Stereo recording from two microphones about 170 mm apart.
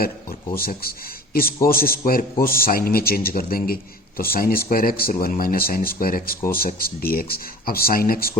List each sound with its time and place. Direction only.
0.0 s speech: 60° left (ahead or behind)